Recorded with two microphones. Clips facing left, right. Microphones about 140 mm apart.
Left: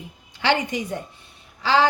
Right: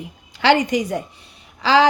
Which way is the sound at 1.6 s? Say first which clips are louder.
Right 4 dB; 90° right.